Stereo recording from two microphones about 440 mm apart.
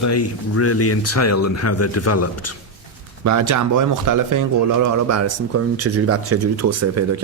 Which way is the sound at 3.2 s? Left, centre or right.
Right.